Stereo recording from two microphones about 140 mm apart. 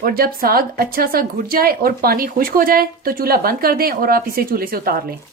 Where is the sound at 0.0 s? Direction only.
90° right.